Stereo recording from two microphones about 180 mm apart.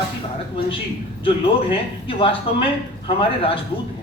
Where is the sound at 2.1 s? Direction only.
30° left (ahead or behind).